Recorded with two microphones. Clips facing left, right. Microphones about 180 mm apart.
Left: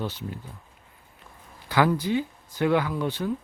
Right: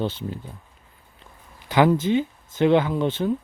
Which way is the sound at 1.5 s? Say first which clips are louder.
Right 4 dB; 20° right (ahead or behind).